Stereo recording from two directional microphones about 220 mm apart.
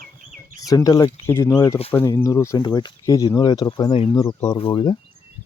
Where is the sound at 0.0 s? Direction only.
40° right (ahead or behind).